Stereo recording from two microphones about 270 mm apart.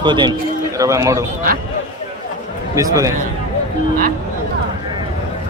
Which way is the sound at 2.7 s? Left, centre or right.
Centre.